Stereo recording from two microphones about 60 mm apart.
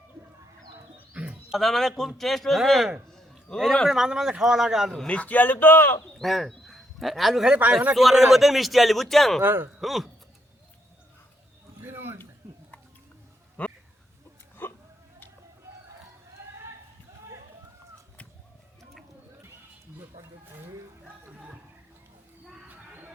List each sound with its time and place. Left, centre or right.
0.9 s bird: right
1.5 s a man's voice: centre
5.0 s speech: left
6.1 s a man's voice: centre
7.5 s speech: right
7.9 s speech: centre
9.4 s a man's voice: right
9.8 s speech: centre
11.8 s a sound: right
13.6 s a sound: left
14.6 s hiccup: left
16.4 s a sound: right
21.3 s music: centre
22.6 s a sound: right